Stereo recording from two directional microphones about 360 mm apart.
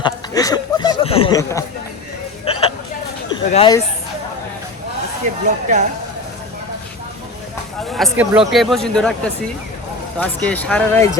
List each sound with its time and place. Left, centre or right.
0.0 s speech: centre
2.5 s a sound: centre
3.3 s speech: centre
5.2 s speech: centre
7.9 s speech: centre